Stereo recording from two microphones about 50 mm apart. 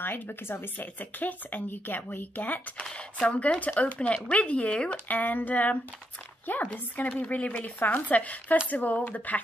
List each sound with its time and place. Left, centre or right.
0.0 s speech: left
2.9 s speech: left